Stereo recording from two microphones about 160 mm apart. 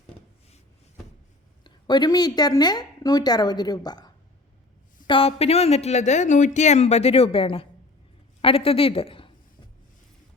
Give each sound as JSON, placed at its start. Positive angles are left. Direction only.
{"t": 1.6, "sound": "a woman's voice", "side_deg": 25}